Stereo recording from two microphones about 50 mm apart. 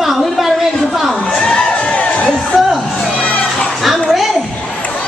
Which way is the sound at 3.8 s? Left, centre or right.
Centre.